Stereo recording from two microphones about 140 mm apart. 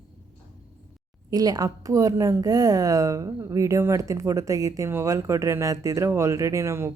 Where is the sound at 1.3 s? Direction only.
25° right (ahead or behind).